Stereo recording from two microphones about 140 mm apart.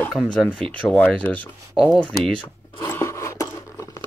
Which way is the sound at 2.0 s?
10° left (ahead or behind).